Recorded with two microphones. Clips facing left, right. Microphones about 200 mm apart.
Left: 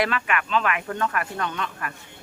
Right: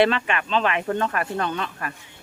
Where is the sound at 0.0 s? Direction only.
30° right (ahead or behind).